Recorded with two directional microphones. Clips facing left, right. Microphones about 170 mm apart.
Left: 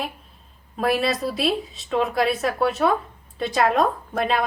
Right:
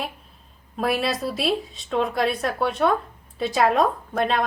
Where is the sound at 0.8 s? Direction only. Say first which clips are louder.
Left 2 dB; centre (ahead or behind).